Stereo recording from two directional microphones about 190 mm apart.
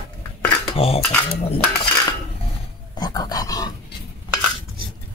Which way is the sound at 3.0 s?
20° left (ahead or behind).